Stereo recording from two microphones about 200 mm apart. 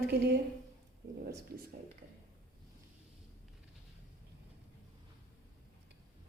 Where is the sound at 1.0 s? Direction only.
65° right (ahead or behind).